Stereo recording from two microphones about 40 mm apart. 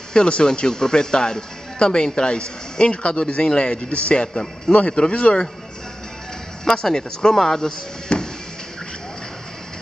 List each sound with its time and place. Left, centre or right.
0.1 s speech: left
4.8 s speech: left
6.6 s speech: centre
8.1 s music: left